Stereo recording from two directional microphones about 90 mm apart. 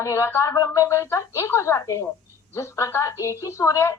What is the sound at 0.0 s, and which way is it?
A woman's voice, 30° left (ahead or behind).